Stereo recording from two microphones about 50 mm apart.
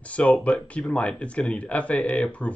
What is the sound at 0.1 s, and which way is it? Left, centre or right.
Speech, left.